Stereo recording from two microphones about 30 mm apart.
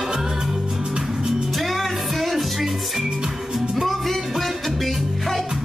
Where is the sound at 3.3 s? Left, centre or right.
Centre.